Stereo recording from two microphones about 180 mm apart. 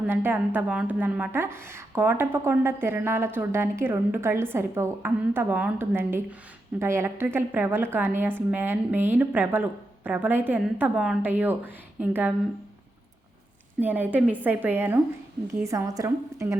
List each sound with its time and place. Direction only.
0.1 s a woman's voice: 10° right (ahead or behind)
13.8 s a woman's voice: 10° right (ahead or behind)